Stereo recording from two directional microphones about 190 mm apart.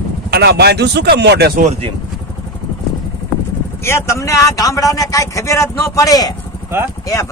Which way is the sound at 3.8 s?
15° left (ahead or behind).